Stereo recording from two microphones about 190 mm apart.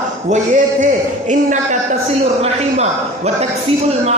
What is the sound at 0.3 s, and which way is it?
Speech, 45° right (ahead or behind).